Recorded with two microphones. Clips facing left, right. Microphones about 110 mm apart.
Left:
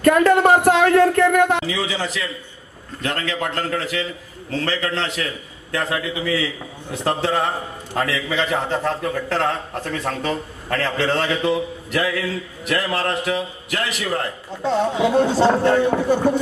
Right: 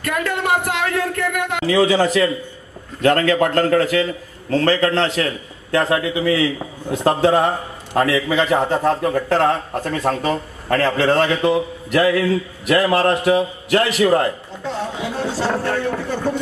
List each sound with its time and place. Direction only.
0.0 s speech: 35° left (ahead or behind)
1.7 s a man's voice: 50° right (ahead or behind)
15.3 s speech: 20° left (ahead or behind)